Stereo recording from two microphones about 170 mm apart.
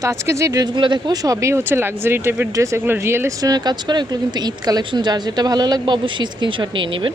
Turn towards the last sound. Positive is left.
turn(degrees=-30)  # may be behind; listen again after turning